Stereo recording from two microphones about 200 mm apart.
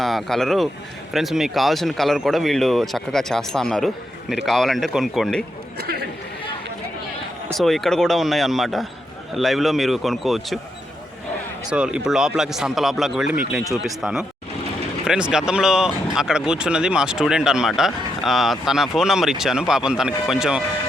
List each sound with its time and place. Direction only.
0.0 s speech: centre (ahead or behind)
5.7 s speech: 55° right (ahead or behind)
7.5 s speech: centre (ahead or behind)
11.7 s speech: 5° right (ahead or behind)